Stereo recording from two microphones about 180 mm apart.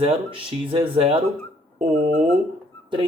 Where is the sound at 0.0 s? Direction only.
30° right (ahead or behind).